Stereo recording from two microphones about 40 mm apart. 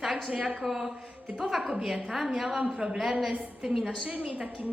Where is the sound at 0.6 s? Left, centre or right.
Centre.